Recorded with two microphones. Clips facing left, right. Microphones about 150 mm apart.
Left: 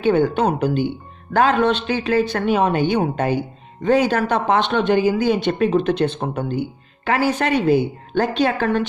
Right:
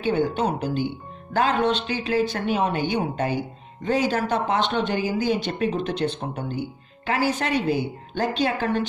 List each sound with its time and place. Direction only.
0.0 s speech: 65° left (ahead or behind)
7.1 s speech: 65° left (ahead or behind)